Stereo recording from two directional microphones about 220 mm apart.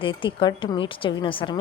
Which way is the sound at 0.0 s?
25° left (ahead or behind).